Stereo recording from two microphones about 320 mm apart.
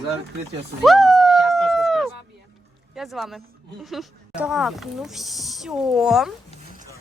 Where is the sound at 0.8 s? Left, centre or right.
Centre.